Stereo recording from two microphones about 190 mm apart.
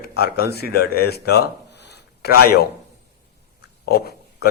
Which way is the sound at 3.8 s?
55° left (ahead or behind).